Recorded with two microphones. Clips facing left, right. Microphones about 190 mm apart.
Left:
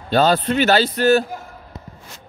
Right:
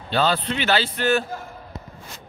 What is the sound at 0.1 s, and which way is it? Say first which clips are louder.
A man's voice: left 6 dB; 45° left (ahead or behind).